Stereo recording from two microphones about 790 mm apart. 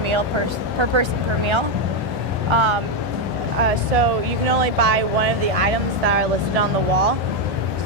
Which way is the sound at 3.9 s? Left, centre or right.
Right.